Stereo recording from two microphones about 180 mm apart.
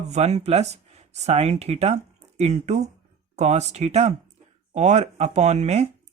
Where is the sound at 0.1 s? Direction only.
35° right (ahead or behind).